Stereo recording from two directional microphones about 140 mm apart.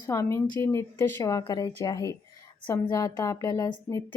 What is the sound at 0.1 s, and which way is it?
A woman's voice, 20° left (ahead or behind).